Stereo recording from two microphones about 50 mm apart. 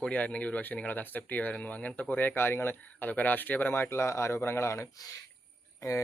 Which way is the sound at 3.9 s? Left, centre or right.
Left.